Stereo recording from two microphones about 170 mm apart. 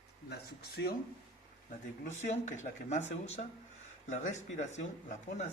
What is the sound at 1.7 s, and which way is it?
Speech, 45° left (ahead or behind).